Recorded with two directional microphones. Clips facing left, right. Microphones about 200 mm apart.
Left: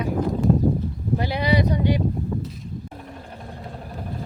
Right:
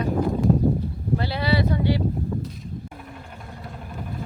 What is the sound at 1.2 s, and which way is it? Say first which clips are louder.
Speech: left 2 dB; 15° left (ahead or behind).